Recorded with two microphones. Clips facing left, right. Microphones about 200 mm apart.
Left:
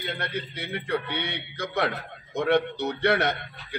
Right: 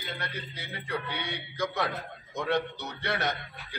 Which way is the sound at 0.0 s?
65° left (ahead or behind).